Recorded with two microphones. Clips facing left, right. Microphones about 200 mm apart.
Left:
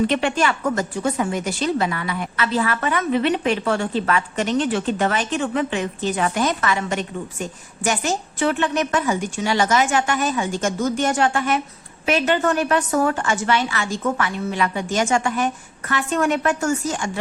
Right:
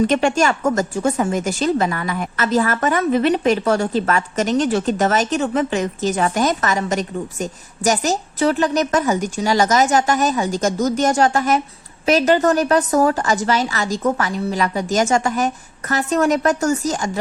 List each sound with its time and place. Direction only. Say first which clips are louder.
0.1 s a woman's voice: right 4 dB; 45° right (ahead or behind)